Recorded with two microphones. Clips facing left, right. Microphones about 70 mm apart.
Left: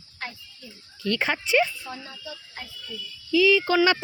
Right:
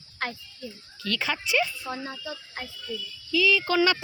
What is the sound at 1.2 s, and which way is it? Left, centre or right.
Speech, left.